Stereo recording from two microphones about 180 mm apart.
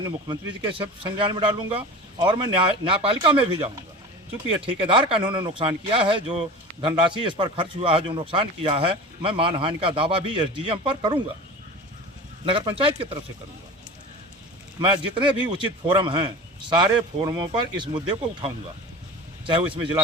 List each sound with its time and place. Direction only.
0.0 s speech: 25° right (ahead or behind)
4.4 s speech: 30° right (ahead or behind)
12.5 s speech: 30° right (ahead or behind)
14.8 s speech: 30° right (ahead or behind)